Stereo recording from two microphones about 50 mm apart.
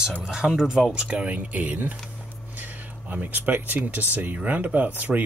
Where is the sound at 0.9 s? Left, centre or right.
Right.